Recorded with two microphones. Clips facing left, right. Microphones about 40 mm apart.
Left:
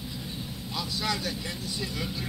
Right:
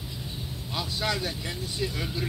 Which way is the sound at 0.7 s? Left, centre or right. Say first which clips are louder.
Right 2 dB; right.